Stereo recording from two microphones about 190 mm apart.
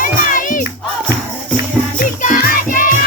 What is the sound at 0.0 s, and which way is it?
Crowd, 45° left (ahead or behind).